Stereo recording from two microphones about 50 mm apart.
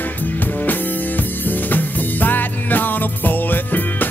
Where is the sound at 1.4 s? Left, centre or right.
Left.